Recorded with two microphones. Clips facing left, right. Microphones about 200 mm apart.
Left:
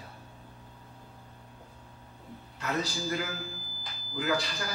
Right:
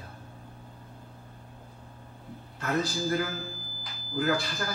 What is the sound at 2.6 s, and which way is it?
Speech, 50° right (ahead or behind).